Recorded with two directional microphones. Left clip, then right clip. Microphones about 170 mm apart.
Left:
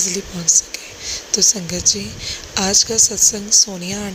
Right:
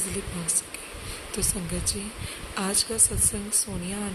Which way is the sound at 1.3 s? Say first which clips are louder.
Left 16 dB; 25° left (ahead or behind).